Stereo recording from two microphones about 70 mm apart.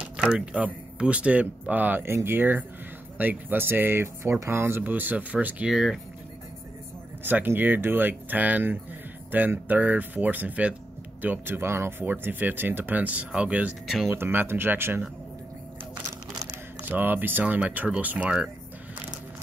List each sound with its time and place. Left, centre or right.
0.3 s speech: centre
5.7 s speech: centre
7.2 s speech: right
14.1 s speech: right
16.9 s speech: right